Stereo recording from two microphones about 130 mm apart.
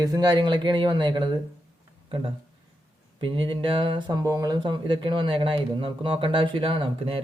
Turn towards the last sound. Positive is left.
turn(degrees=-45)  # may be behind; listen again after turning